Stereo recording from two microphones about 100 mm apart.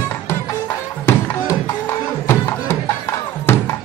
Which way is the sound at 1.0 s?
25° left (ahead or behind).